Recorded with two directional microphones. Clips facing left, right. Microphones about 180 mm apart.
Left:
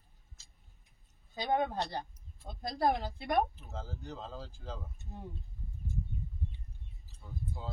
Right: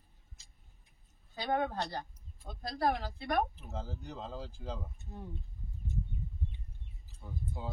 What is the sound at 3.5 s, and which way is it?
Speech, 15° right (ahead or behind).